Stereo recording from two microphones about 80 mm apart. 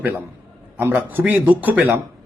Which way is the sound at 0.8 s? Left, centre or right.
Right.